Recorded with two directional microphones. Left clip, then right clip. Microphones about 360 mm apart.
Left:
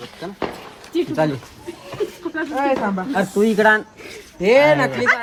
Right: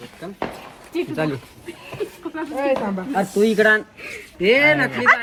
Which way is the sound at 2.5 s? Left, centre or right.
Centre.